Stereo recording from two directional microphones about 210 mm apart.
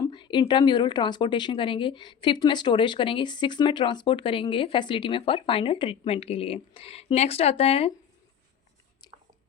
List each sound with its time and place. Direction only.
0.0 s speech: 20° left (ahead or behind)